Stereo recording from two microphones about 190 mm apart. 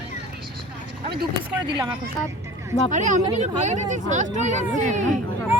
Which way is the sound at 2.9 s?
40° right (ahead or behind).